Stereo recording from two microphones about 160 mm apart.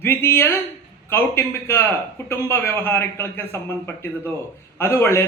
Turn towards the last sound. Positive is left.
turn(degrees=15)  # may be behind; listen again after turning